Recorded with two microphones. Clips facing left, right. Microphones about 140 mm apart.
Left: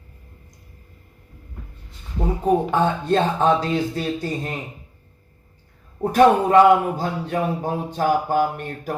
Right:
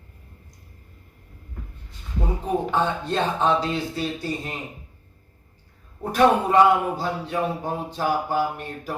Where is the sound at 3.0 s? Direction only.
50° left (ahead or behind).